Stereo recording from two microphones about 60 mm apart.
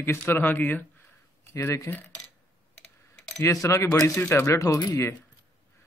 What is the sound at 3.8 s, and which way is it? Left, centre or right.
Speech, left.